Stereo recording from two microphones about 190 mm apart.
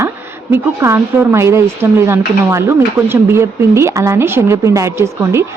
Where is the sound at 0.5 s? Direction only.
15° right (ahead or behind).